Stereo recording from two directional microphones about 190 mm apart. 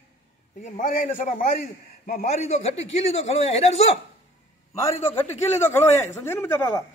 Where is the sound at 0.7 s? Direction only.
40° left (ahead or behind).